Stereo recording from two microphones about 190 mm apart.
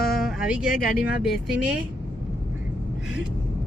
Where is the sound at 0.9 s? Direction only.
55° left (ahead or behind).